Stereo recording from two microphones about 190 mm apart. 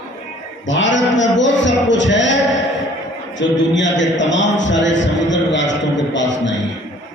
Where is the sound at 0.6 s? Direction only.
75° left (ahead or behind).